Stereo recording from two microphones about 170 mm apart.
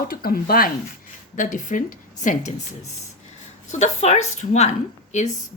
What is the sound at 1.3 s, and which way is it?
A woman's voice, 50° left (ahead or behind).